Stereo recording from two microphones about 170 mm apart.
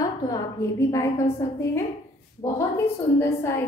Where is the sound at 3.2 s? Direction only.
15° left (ahead or behind).